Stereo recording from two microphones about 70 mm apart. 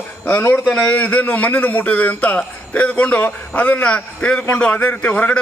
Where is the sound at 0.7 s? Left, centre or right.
Centre.